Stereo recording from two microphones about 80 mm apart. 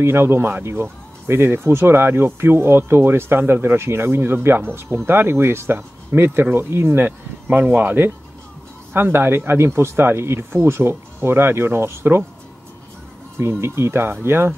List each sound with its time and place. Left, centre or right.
0.0 s speech: right
13.4 s speech: right